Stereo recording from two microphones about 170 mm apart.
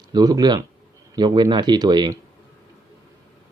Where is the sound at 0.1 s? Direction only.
25° right (ahead or behind).